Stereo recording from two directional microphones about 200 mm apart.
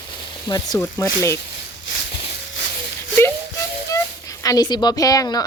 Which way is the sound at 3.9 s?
15° left (ahead or behind).